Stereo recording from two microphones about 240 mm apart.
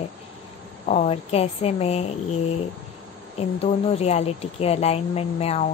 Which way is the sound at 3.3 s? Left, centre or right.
Left.